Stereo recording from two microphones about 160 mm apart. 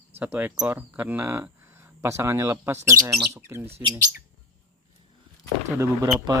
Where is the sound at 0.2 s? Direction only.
10° right (ahead or behind).